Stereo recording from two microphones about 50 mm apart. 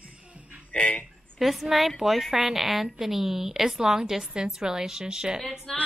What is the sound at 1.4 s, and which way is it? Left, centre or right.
A woman's voice, centre.